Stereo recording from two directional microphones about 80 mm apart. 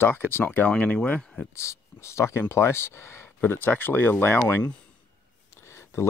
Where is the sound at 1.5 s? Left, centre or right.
Left.